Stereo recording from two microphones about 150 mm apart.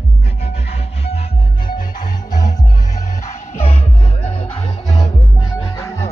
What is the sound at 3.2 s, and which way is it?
Music, 45° left (ahead or behind).